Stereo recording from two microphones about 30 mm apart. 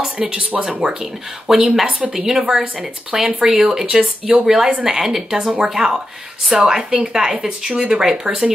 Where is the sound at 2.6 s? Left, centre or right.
Right; by 5.5 s centre.